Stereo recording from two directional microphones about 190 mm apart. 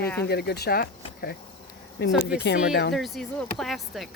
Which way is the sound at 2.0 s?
60° left (ahead or behind).